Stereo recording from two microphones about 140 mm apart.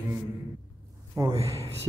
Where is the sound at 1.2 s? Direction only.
25° right (ahead or behind).